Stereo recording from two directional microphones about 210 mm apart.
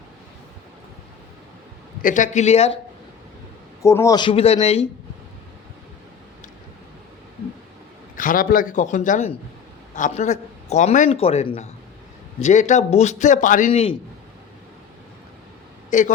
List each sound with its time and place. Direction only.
2.0 s speech: 40° left (ahead or behind)
3.8 s speech: 15° left (ahead or behind)
8.1 s speech: 40° left (ahead or behind)
15.9 s a man's voice: 35° left (ahead or behind)